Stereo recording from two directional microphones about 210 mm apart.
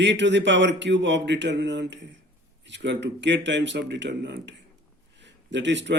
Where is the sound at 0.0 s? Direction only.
60° right (ahead or behind).